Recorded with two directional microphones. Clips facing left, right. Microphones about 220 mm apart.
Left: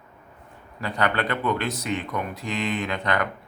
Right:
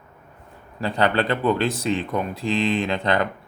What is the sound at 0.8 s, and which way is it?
Speech, 30° right (ahead or behind).